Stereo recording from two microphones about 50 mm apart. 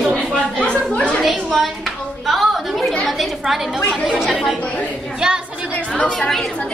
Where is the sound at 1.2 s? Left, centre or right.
Centre.